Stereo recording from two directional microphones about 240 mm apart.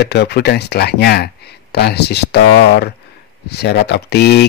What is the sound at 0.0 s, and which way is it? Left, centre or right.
Speech, left.